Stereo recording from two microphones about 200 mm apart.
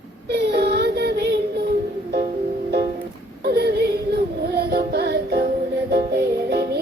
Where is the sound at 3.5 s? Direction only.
55° right (ahead or behind).